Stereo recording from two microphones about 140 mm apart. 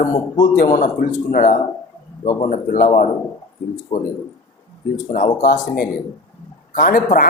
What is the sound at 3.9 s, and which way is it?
Speech, 45° left (ahead or behind).